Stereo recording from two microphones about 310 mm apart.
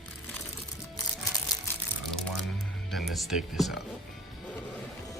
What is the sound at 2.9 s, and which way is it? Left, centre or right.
Speech, centre.